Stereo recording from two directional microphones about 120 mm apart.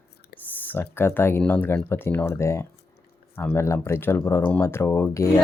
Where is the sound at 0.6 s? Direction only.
15° left (ahead or behind).